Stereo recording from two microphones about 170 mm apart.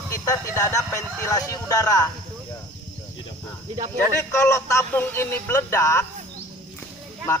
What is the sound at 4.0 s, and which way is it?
A man's voice, 15° left (ahead or behind).